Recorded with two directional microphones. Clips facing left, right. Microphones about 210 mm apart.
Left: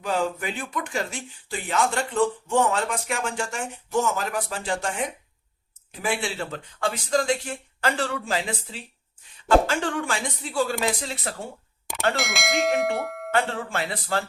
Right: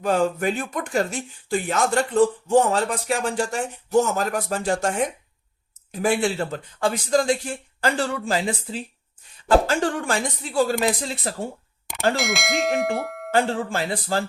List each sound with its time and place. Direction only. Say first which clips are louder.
0.0 s speech: right 5 dB; 45° right (ahead or behind)
12.1 s speech: right 2 dB; centre (ahead or behind)
13.3 s speech: right 4 dB; 35° right (ahead or behind)